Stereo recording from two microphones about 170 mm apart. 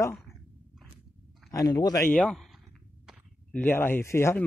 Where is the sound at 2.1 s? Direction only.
5° left (ahead or behind).